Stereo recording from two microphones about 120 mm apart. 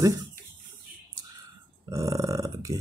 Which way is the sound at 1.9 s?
25° right (ahead or behind).